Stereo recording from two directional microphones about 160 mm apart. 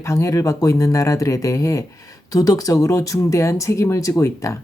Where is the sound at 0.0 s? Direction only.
20° left (ahead or behind).